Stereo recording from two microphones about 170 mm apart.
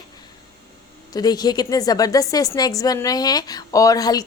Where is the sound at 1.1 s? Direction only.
25° left (ahead or behind).